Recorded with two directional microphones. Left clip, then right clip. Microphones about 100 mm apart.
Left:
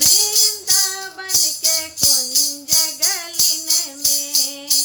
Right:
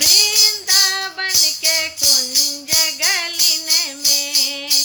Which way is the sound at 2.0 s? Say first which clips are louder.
Right 2 dB; 55° right (ahead or behind).